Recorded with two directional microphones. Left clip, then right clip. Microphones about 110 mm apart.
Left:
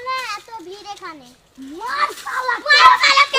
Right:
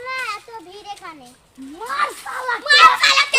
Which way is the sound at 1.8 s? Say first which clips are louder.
Left 1 dB; 15° right (ahead or behind).